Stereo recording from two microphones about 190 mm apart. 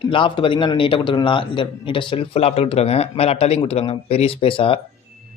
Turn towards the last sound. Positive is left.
turn(degrees=30)  # may be behind; listen again after turning